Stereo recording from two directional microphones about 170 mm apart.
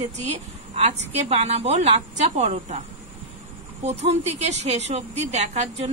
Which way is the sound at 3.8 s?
40° right (ahead or behind).